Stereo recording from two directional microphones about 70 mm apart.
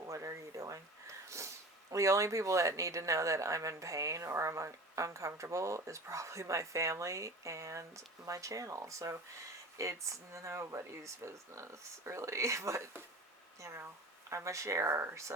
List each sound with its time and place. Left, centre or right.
0.1 s speech: right